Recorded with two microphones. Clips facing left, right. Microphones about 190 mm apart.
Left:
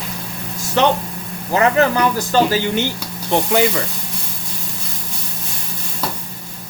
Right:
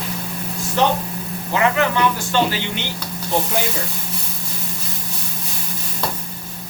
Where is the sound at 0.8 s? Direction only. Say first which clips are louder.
Left 3 dB; 70° left (ahead or behind).